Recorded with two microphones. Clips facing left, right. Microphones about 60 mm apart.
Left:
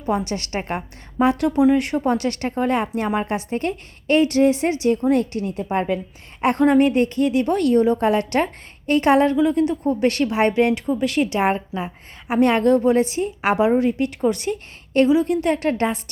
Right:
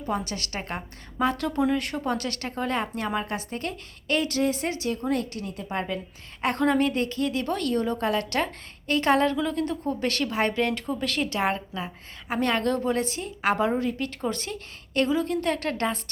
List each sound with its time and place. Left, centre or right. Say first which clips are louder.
0.1 s a woman's voice: left 7 dB; left
14.1 s speech: left 9 dB; centre